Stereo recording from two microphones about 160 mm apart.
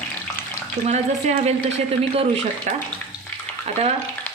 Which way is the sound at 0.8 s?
45° right (ahead or behind).